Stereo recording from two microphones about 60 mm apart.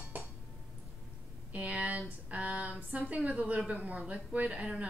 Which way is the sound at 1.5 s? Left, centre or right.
Right.